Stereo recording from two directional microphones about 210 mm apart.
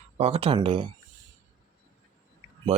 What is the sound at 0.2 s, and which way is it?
Speech, 30° right (ahead or behind).